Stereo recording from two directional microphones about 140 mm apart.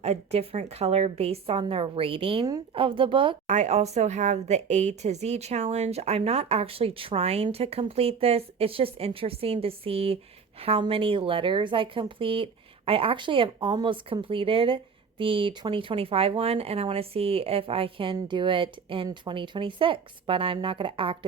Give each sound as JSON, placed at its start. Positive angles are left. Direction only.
{"t": 0.0, "sound": "a woman's voice", "side_deg": -50}
{"t": 3.4, "sound": "a woman's voice", "side_deg": -55}